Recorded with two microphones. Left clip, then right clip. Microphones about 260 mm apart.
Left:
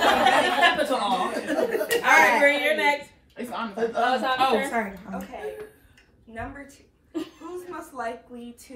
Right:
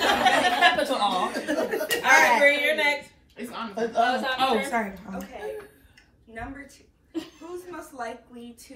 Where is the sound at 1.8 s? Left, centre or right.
Centre.